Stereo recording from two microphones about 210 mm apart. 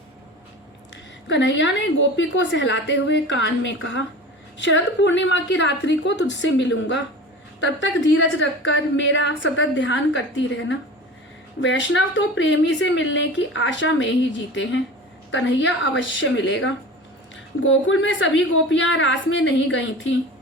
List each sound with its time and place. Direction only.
1.3 s a woman's voice: 60° left (ahead or behind)